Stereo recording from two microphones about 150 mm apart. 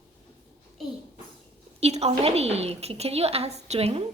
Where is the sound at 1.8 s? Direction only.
45° right (ahead or behind).